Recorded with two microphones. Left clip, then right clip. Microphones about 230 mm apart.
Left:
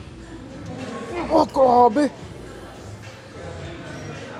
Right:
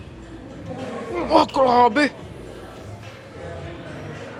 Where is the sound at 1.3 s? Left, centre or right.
Right.